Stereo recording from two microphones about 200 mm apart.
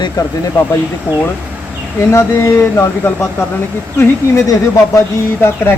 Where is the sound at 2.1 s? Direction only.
15° left (ahead or behind).